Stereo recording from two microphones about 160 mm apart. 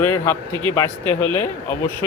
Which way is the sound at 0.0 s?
15° left (ahead or behind).